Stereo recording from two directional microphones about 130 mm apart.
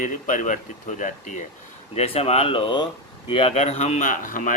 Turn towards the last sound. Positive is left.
turn(degrees=90)